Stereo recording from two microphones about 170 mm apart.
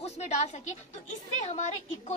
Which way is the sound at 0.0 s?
40° left (ahead or behind).